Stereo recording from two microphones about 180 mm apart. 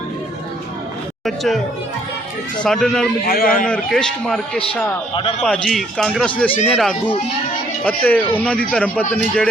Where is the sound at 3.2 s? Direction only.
55° left (ahead or behind).